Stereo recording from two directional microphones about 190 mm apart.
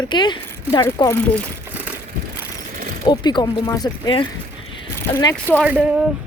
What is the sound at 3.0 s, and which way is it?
A woman's voice, 20° left (ahead or behind).